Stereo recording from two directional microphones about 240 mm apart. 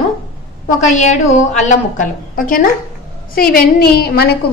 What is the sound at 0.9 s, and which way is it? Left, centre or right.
A woman's voice, left.